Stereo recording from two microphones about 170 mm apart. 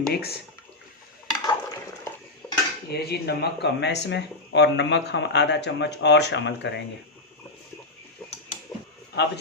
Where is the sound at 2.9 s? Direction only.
70° left (ahead or behind); by 6.8 s 90° left.